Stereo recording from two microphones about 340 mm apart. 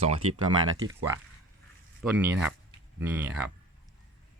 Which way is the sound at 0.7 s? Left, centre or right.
Right.